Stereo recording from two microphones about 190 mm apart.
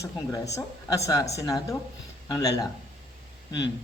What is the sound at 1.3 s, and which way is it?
A man's voice, 15° left (ahead or behind).